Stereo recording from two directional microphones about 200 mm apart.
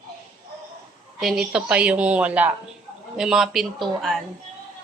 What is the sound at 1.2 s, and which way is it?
A woman's voice, centre (ahead or behind).